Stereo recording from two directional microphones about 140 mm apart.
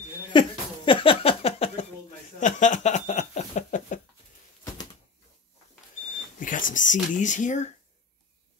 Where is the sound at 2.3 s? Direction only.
60° left (ahead or behind).